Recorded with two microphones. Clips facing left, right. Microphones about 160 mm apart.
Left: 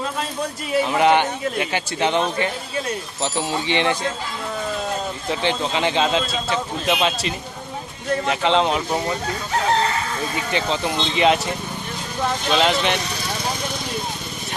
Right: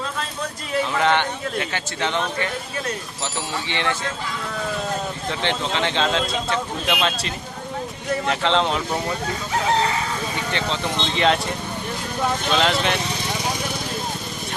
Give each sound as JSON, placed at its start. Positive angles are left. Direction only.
{"t": 0.7, "sound": "a man's voice", "side_deg": 15}
{"t": 3.5, "sound": "speech", "side_deg": 20}
{"t": 5.3, "sound": "a man's voice", "side_deg": 10}
{"t": 10.5, "sound": "speech", "side_deg": 10}